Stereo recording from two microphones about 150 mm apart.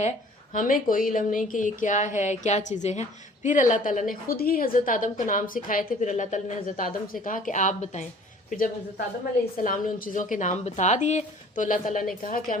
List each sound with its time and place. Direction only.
0.5 s a woman's voice: 65° left (ahead or behind)